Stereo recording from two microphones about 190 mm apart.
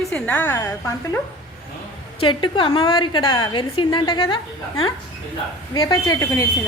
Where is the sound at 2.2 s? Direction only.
25° left (ahead or behind).